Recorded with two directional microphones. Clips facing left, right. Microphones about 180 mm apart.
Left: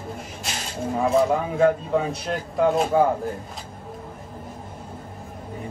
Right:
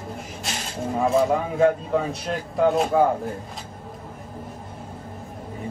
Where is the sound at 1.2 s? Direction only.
Centre (ahead or behind).